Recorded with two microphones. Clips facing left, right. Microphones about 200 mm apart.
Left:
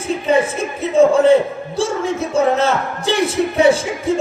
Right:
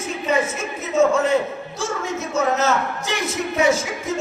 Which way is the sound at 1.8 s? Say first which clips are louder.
Left 7 dB; 30° left (ahead or behind).